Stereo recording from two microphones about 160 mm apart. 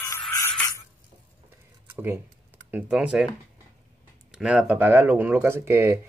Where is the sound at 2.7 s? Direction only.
5° right (ahead or behind).